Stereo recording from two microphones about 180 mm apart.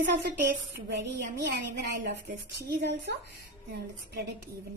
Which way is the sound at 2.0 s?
60° right (ahead or behind).